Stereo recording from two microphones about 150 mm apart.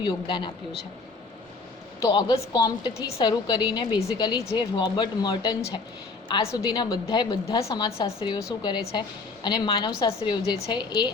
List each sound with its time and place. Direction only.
0.0 s a woman's voice: 35° left (ahead or behind)
2.0 s a woman's voice: 30° left (ahead or behind)